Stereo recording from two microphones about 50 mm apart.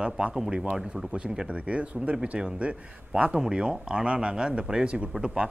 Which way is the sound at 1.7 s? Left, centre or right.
Right.